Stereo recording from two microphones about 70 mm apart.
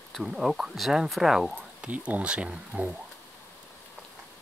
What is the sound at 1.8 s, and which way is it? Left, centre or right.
Speech, centre.